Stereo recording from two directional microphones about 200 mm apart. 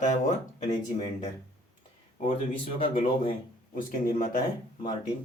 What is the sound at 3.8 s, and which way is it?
Speech, 45° left (ahead or behind).